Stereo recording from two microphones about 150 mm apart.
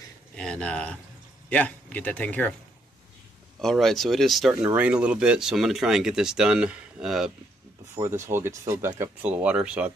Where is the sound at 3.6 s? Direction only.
Centre (ahead or behind).